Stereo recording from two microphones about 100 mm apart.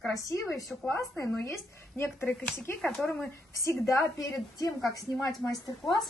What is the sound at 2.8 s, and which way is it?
Speech, 5° left (ahead or behind).